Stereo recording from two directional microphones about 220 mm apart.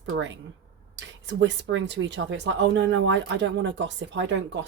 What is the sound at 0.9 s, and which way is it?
Speech, 55° right (ahead or behind).